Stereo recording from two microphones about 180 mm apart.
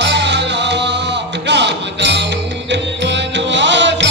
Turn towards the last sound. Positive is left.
turn(degrees=-80)